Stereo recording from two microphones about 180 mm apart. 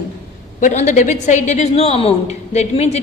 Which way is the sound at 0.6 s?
40° left (ahead or behind).